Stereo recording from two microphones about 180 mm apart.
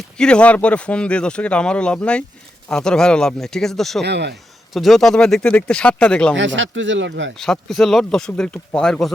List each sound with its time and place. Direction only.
0.2 s speech: 5° left (ahead or behind)
4.0 s speech: 65° right (ahead or behind)
4.7 s speech: centre (ahead or behind)
6.3 s speech: 90° right
7.3 s speech: centre (ahead or behind)